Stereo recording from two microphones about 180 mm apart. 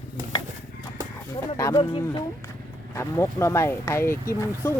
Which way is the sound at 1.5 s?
20° left (ahead or behind).